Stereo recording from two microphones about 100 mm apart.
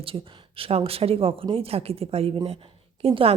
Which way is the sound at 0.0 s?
65° right (ahead or behind).